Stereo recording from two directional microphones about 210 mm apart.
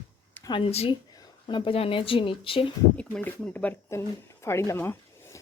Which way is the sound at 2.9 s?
5° left (ahead or behind).